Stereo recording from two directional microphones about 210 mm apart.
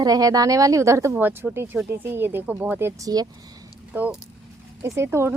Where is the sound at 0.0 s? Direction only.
15° right (ahead or behind).